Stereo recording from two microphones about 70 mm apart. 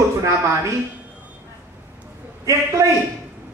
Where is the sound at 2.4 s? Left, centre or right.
Right.